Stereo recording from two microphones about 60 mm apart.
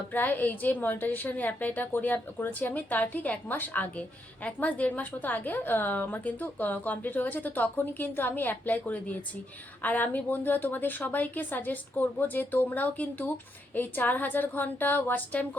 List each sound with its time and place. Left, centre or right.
0.1 s a woman's voice: left